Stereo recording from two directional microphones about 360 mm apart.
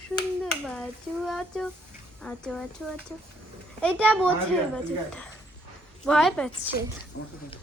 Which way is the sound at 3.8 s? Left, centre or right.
Centre.